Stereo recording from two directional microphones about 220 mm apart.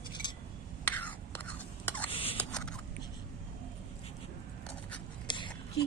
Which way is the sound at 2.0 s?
25° left (ahead or behind).